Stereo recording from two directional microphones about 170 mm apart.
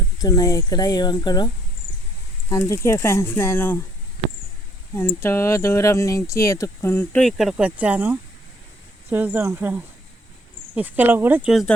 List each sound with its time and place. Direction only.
0.2 s speech: 20° left (ahead or behind)
2.5 s speech: 15° left (ahead or behind)
4.9 s speech: 15° left (ahead or behind); by 11.5 s 10° right (ahead or behind)